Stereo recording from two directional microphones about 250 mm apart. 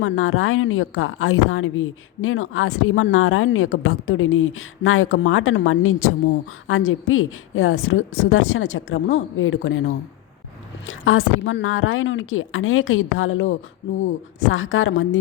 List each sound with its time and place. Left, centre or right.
0.0 s a woman's voice: left